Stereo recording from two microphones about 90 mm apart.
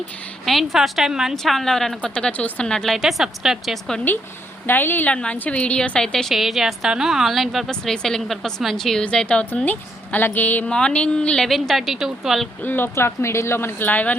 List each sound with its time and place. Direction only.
0.4 s a woman's voice: centre (ahead or behind)
4.6 s a woman's voice: 20° left (ahead or behind)
6.3 s a woman's voice: centre (ahead or behind)
11.4 s a woman's voice: centre (ahead or behind)
12.6 s speech: 25° left (ahead or behind)